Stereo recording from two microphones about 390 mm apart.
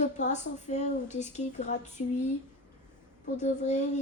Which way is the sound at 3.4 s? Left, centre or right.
Centre.